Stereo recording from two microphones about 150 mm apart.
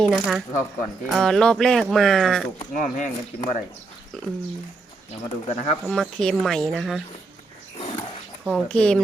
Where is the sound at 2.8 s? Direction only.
55° left (ahead or behind).